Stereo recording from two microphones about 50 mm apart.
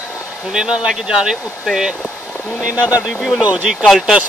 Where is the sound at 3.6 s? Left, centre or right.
Centre.